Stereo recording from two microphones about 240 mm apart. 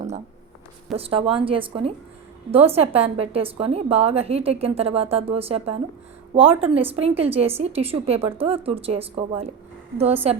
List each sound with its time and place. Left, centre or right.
0.9 s a woman's voice: right